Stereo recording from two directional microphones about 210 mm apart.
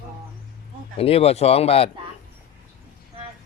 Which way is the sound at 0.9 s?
30° left (ahead or behind).